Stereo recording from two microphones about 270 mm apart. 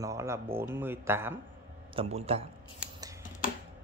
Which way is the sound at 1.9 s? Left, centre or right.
Right.